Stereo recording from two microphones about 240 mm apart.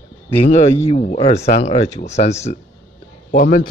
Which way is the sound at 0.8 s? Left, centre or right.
Left.